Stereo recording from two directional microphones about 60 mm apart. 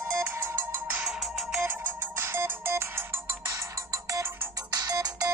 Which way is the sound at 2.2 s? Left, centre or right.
Right.